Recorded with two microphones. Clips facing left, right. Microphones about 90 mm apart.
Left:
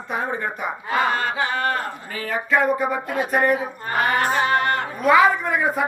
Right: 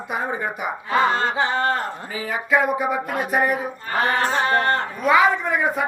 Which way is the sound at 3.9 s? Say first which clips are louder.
Even; 30° right (ahead or behind).